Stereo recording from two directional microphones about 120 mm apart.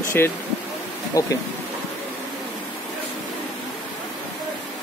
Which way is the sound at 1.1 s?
30° left (ahead or behind).